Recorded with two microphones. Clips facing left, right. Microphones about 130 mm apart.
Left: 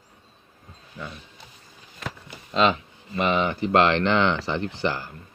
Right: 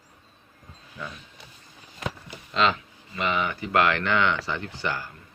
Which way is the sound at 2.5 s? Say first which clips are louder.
Left 3 dB; 20° left (ahead or behind).